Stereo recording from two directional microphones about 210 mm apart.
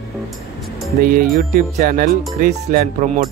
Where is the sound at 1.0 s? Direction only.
45° right (ahead or behind).